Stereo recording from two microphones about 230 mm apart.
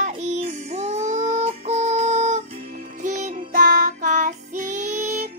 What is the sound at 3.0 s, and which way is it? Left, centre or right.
Music, right.